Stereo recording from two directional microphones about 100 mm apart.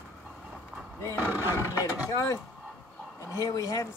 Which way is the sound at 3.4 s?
35° left (ahead or behind).